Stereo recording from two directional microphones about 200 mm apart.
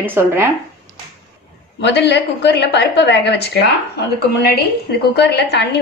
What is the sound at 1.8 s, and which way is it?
A woman's voice, 55° left (ahead or behind).